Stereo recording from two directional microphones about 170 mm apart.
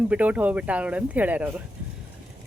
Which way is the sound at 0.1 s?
10° right (ahead or behind).